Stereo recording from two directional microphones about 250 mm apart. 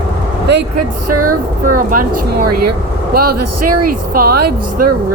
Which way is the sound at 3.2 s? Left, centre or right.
Right.